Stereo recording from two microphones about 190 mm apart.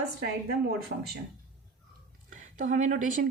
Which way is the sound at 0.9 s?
65° right (ahead or behind).